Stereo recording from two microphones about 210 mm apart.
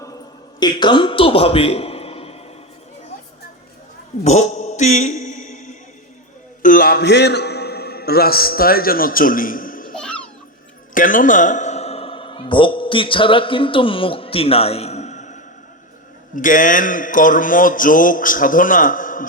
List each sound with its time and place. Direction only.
0.6 s a man's voice: 20° left (ahead or behind)
4.2 s mantra: 30° left (ahead or behind)
6.6 s a man's voice: 40° left (ahead or behind)
9.9 s music: 5° left (ahead or behind)
10.9 s a man's voice: 40° left (ahead or behind)